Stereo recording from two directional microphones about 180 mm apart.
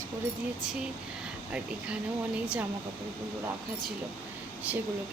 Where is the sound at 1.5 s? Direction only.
5° right (ahead or behind).